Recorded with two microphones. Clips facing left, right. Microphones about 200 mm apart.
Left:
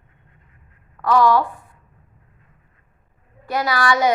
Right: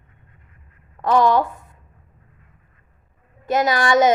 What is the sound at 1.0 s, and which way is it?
Speech, 20° right (ahead or behind).